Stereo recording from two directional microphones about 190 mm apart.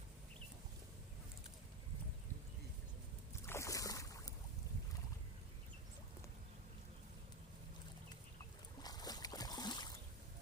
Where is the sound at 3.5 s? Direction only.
15° left (ahead or behind).